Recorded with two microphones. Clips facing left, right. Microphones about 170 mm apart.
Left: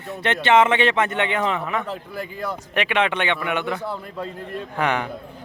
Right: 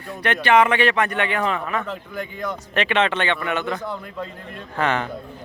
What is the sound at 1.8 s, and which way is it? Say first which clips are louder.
Speech: even; 35° left (ahead or behind).